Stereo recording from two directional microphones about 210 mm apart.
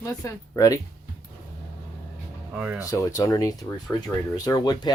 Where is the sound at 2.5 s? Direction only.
5° right (ahead or behind).